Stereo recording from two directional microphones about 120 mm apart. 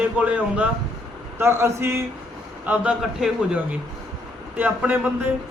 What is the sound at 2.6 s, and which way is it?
Speech, 10° right (ahead or behind).